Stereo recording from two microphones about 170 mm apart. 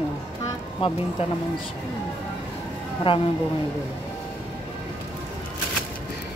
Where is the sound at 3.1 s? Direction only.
30° left (ahead or behind).